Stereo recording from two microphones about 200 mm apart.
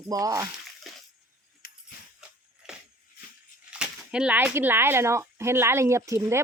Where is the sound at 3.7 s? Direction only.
5° right (ahead or behind).